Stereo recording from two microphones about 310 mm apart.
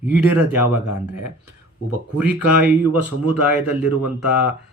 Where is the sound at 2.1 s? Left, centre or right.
Centre.